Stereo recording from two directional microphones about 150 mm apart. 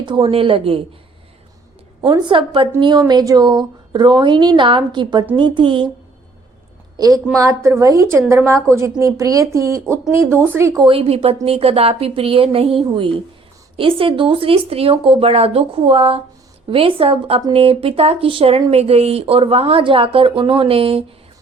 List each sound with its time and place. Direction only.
0.0 s speech: 35° right (ahead or behind)
2.0 s speech: 25° right (ahead or behind)
6.9 s a woman's voice: 25° right (ahead or behind)
10.8 s speech: 40° right (ahead or behind)